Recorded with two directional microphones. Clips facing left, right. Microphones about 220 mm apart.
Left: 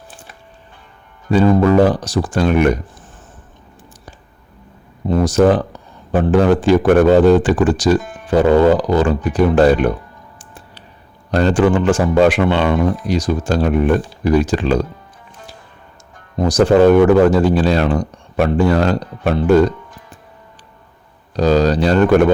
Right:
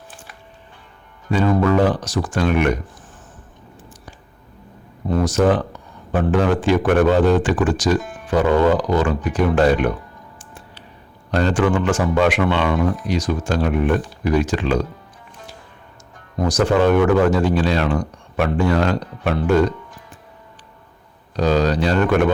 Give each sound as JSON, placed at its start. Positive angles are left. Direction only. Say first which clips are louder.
{"t": 1.3, "sound": "speech", "louder": "left 5 dB", "side_deg": 35}
{"t": 5.0, "sound": "speech", "louder": "left 4 dB", "side_deg": 30}
{"t": 11.3, "sound": "speech", "louder": "left 4 dB", "side_deg": 35}
{"t": 16.4, "sound": "speech", "louder": "left 6 dB", "side_deg": 30}
{"t": 21.3, "sound": "speech", "louder": "left 4 dB", "side_deg": 35}